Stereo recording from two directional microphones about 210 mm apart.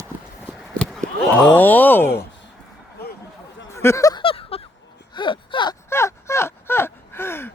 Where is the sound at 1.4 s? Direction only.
10° left (ahead or behind).